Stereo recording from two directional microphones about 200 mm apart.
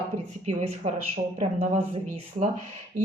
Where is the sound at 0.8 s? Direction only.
30° right (ahead or behind).